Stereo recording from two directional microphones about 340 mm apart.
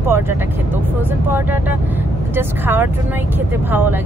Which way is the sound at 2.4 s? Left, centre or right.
Centre.